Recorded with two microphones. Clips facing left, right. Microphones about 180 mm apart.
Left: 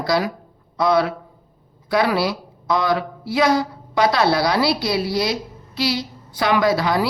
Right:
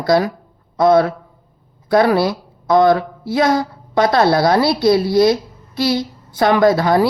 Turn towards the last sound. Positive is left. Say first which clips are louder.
# right 5 dB
turn(degrees=-50)  # may be behind; listen again after turning